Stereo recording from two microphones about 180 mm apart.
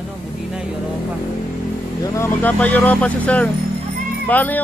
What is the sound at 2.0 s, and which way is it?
Speech, 15° left (ahead or behind).